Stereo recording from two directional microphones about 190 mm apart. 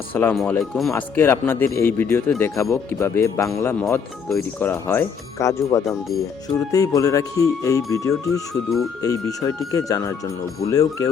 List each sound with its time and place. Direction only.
0.1 s speech: 10° left (ahead or behind)